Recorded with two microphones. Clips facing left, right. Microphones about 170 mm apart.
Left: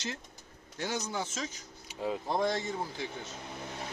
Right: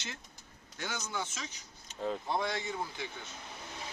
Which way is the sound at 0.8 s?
35° left (ahead or behind).